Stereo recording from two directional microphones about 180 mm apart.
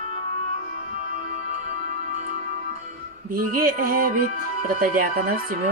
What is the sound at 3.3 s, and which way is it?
Speech, 55° right (ahead or behind).